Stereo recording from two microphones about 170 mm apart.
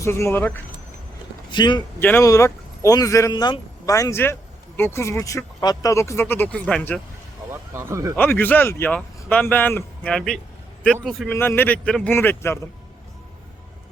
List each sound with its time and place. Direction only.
0.0 s speech: 15° left (ahead or behind)
1.5 s speech: 25° left (ahead or behind)
2.0 s speech: 10° left (ahead or behind)
7.5 s speech: 15° right (ahead or behind)
8.1 s a man's voice: 10° left (ahead or behind)
11.3 s speech: 10° left (ahead or behind)